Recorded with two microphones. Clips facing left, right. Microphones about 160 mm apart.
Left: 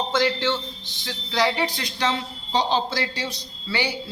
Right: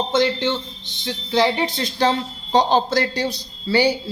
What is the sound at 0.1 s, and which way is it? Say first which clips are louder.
Speech: right 3 dB; 20° right (ahead or behind).